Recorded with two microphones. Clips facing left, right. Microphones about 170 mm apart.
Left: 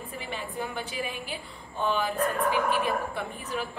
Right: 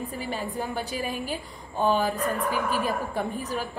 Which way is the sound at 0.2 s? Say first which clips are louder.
Right 2 dB; 40° right (ahead or behind).